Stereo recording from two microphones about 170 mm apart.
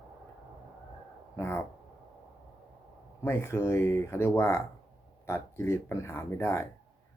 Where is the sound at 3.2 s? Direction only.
15° left (ahead or behind).